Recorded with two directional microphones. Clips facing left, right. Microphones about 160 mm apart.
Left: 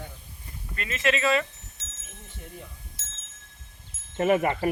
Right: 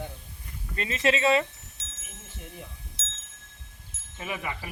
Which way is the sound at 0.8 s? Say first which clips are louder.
Right 1 dB; 30° right (ahead or behind).